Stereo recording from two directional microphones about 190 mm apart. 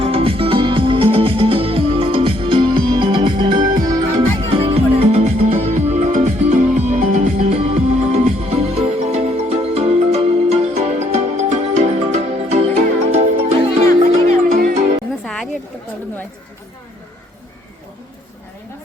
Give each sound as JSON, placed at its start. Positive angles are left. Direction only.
{"t": 0.0, "sound": "music", "side_deg": -30}
{"t": 14.3, "sound": "music", "side_deg": -40}
{"t": 15.2, "sound": "music", "side_deg": 5}